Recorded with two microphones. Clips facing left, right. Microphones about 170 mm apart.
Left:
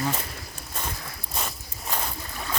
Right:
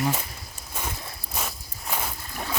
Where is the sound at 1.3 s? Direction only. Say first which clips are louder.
Even; 5° right (ahead or behind).